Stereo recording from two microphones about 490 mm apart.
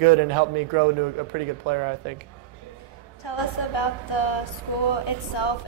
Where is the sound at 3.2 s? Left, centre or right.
Left.